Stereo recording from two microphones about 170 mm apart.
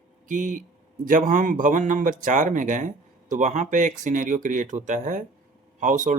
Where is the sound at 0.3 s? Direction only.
50° right (ahead or behind).